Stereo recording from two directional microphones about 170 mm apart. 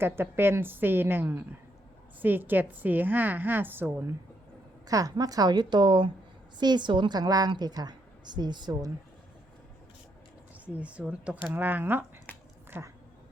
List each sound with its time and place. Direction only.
0.0 s a woman's voice: 15° right (ahead or behind)
10.8 s a woman's voice: 5° right (ahead or behind)